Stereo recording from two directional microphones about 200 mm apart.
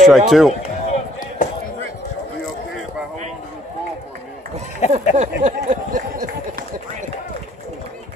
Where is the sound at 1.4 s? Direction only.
40° left (ahead or behind).